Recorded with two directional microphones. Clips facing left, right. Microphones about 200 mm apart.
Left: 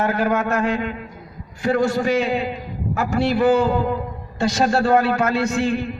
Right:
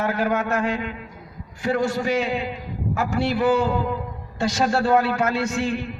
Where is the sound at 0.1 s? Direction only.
50° left (ahead or behind).